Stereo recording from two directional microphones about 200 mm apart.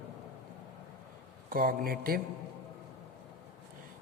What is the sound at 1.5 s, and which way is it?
Speech, 45° right (ahead or behind).